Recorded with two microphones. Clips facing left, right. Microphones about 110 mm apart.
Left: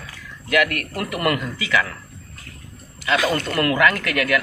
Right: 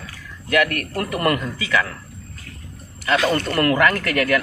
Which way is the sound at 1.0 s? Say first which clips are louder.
Right 1 dB; 30° right (ahead or behind).